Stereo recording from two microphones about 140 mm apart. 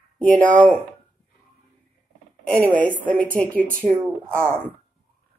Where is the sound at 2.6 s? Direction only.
10° left (ahead or behind).